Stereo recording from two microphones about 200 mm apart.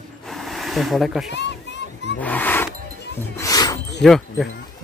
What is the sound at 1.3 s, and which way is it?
Splash, 60° left (ahead or behind).